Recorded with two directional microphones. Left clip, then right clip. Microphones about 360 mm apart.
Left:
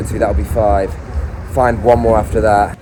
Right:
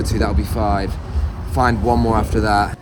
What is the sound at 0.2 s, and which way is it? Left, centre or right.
Speech, centre.